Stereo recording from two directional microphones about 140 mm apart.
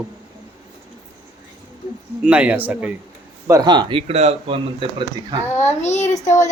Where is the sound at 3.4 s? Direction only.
25° right (ahead or behind); by 4.6 s 50° right (ahead or behind).